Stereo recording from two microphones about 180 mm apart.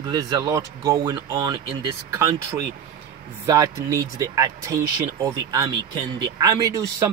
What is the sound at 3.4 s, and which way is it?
A man's voice, 20° right (ahead or behind).